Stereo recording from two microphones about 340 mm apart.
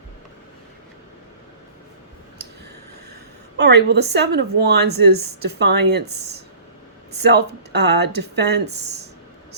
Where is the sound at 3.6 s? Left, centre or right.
Right.